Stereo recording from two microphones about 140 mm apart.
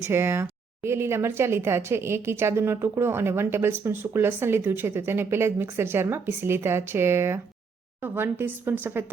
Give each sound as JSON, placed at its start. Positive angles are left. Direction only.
{"t": 0.0, "sound": "a woman's voice", "side_deg": -20}